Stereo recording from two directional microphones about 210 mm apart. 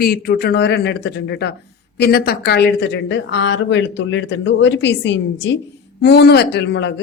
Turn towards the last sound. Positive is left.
turn(degrees=55)  # may be behind; listen again after turning